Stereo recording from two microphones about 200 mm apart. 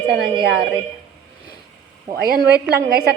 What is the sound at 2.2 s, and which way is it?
Speech, 50° right (ahead or behind).